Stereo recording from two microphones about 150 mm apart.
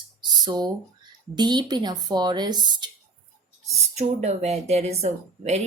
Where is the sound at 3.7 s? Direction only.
50° right (ahead or behind).